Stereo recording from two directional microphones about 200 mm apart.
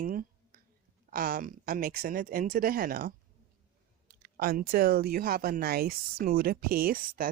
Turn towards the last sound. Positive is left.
turn(degrees=-45)  # may be behind; listen again after turning